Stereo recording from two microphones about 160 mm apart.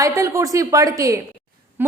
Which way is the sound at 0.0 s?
20° right (ahead or behind).